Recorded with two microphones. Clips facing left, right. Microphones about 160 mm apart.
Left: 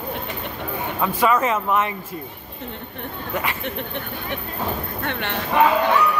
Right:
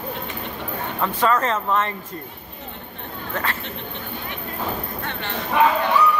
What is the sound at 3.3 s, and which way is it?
Speech, 10° left (ahead or behind).